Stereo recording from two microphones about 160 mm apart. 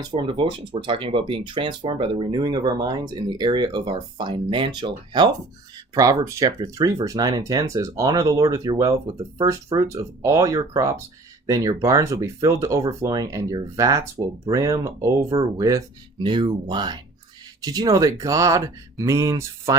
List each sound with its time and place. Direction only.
0.0 s speech: 30° right (ahead or behind)